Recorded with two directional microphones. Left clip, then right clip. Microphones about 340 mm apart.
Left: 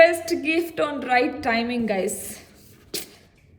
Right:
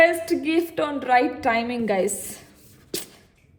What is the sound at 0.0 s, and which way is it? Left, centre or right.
A woman's voice, centre.